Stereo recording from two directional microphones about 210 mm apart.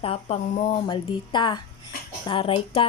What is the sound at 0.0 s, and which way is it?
Speech, 25° left (ahead or behind).